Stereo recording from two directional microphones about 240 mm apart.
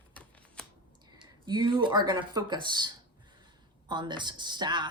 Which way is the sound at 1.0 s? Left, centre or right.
Centre.